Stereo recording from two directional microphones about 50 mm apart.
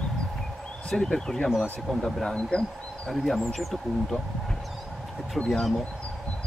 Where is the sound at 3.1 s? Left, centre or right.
Centre.